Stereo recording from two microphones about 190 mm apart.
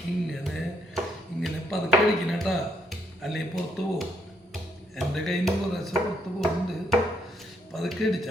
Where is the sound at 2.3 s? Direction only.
Centre (ahead or behind).